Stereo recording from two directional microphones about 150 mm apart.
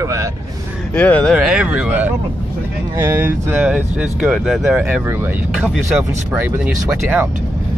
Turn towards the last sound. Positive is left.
turn(degrees=-10)  # may be behind; listen again after turning